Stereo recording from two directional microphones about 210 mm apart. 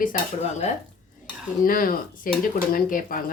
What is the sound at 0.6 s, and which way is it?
Dishes, 30° left (ahead or behind).